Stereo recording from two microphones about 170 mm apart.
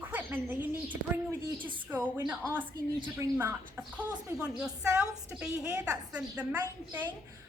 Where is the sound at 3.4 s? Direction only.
10° right (ahead or behind).